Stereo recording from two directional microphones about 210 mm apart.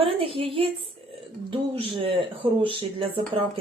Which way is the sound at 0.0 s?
25° right (ahead or behind).